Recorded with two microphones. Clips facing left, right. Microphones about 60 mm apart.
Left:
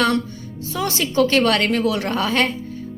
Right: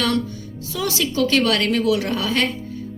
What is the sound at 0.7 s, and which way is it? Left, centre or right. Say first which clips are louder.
A woman's voice: left 1 dB; left.